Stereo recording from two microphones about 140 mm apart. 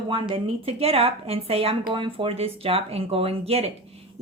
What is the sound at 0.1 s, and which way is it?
Speech, 35° right (ahead or behind).